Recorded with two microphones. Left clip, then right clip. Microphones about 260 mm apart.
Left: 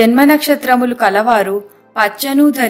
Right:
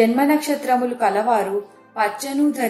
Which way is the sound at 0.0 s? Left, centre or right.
Left.